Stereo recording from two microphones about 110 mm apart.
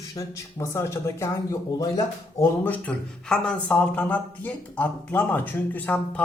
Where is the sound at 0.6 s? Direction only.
25° left (ahead or behind).